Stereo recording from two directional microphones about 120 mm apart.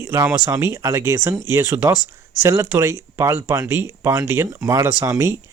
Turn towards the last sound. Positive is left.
turn(degrees=-25)  # may be behind; listen again after turning